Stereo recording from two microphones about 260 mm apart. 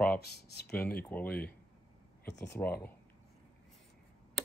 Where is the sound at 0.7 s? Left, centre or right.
Centre.